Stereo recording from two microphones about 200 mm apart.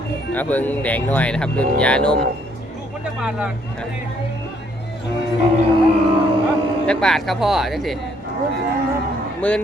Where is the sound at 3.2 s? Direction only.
5° right (ahead or behind).